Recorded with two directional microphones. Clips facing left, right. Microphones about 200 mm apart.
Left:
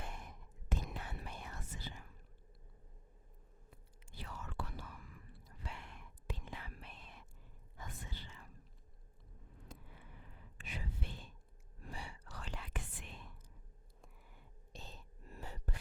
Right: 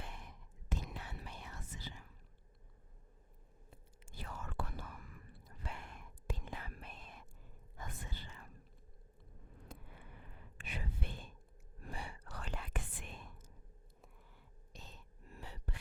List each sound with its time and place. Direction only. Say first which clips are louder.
0.0 s whispering: left 2 dB; 45° left (ahead or behind)
4.1 s whispering: right 1 dB; 50° right (ahead or behind)
9.6 s a sound: right 1 dB; 55° right (ahead or behind)
11.8 s whispering: right 2 dB; 55° right (ahead or behind)
14.7 s whispering: left 3 dB; 30° left (ahead or behind)